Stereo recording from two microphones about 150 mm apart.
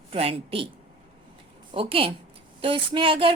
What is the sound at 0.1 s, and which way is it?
Speech, 40° right (ahead or behind).